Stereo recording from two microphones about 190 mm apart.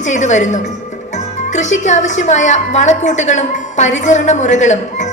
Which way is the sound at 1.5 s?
40° left (ahead or behind).